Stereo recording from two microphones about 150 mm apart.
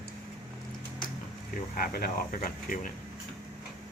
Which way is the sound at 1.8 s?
75° left (ahead or behind).